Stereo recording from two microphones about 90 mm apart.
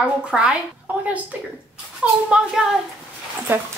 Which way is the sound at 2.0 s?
10° right (ahead or behind).